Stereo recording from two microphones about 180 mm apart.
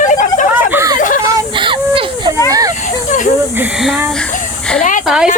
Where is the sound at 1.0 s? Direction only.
45° left (ahead or behind).